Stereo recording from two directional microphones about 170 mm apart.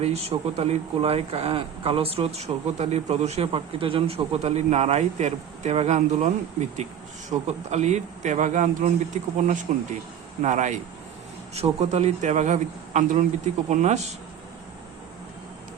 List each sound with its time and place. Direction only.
0.0 s a man's voice: 40° right (ahead or behind)